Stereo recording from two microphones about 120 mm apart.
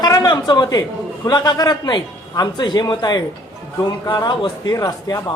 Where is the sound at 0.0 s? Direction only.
35° left (ahead or behind).